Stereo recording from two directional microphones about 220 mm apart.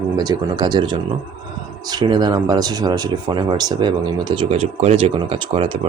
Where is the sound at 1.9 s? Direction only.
20° right (ahead or behind).